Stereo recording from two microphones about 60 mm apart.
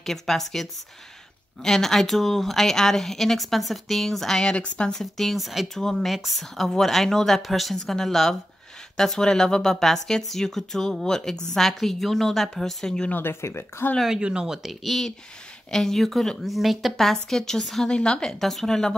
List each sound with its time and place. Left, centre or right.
0.0 s a woman's voice: centre
4.9 s a woman's voice: centre
13.1 s speech: left
14.0 s a woman's voice: centre
18.4 s speech: centre